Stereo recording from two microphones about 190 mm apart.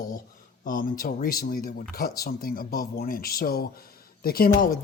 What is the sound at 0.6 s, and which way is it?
Speech, 45° left (ahead or behind).